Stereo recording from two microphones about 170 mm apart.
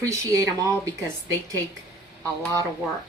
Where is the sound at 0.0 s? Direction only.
20° right (ahead or behind).